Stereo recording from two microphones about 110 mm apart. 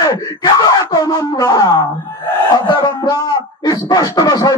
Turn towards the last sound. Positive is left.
turn(degrees=40)  # may be behind; listen again after turning